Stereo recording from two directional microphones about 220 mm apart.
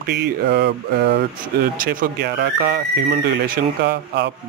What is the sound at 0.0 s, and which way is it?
A man's voice, 50° right (ahead or behind).